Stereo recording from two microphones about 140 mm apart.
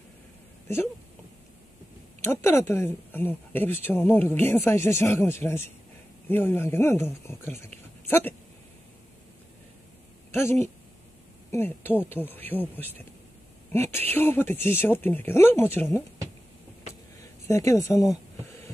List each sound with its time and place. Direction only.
2.2 s speech: 15° left (ahead or behind)
10.3 s speech: 15° left (ahead or behind)
17.5 s speech: 20° left (ahead or behind)